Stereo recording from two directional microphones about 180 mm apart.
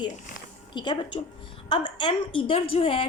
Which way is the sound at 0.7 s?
25° left (ahead or behind).